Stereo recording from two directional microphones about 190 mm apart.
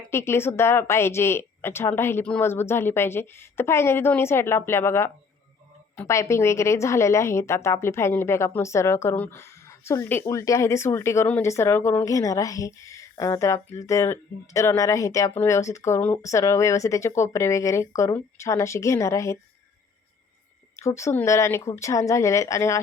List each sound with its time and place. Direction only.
0.1 s a woman's voice: 15° left (ahead or behind)
20.7 s a woman's voice: 15° left (ahead or behind)